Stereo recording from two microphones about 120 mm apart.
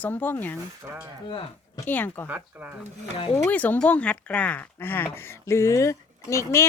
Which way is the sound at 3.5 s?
15° left (ahead or behind).